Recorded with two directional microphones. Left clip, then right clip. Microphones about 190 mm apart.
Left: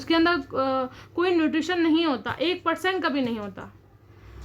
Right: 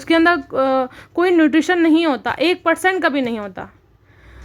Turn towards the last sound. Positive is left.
turn(degrees=-40)  # may be behind; listen again after turning